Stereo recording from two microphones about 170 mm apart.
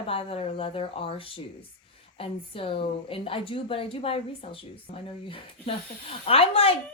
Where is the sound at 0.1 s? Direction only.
35° left (ahead or behind).